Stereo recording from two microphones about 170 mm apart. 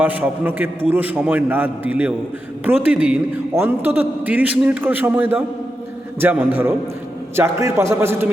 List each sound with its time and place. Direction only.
0.0 s a man's voice: 10° right (ahead or behind)